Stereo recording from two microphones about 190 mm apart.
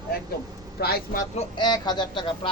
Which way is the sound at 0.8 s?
55° left (ahead or behind).